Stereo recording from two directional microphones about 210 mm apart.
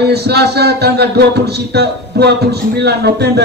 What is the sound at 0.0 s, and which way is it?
Speech, 50° right (ahead or behind).